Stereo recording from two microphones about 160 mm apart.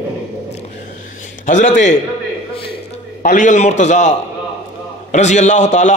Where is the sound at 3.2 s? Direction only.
55° left (ahead or behind).